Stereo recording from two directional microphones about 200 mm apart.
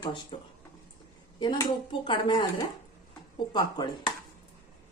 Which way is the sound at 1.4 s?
25° left (ahead or behind).